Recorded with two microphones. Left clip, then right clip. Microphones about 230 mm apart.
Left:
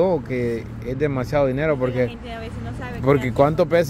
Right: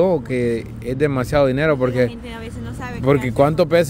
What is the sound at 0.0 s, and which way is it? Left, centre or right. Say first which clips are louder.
Speech: right 3 dB; centre.